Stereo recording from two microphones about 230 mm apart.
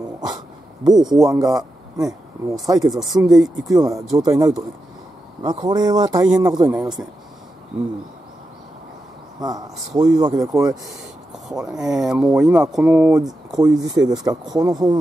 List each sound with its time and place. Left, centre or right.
1.1 s speech: centre
2.9 s speech: centre
3.3 s speech: centre
9.4 s speech: centre
11.4 s speech: centre